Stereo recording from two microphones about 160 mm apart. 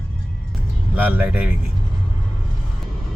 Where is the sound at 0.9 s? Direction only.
10° right (ahead or behind).